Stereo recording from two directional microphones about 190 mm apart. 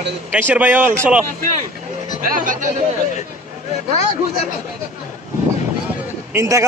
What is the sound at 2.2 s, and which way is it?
Speech, 45° right (ahead or behind).